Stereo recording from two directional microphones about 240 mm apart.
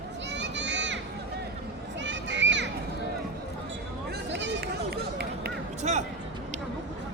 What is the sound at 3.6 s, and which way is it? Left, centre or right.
Run, right.